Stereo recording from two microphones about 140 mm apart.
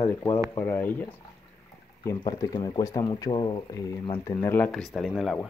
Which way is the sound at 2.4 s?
30° left (ahead or behind).